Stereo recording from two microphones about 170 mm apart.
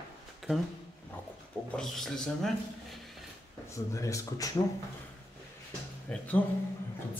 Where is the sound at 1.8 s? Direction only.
Centre (ahead or behind).